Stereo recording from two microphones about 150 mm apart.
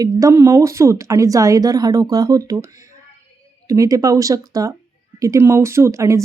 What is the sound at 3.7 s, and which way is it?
Speech, 25° right (ahead or behind).